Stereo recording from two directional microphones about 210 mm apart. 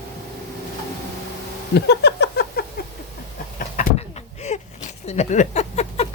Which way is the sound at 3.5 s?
35° left (ahead or behind).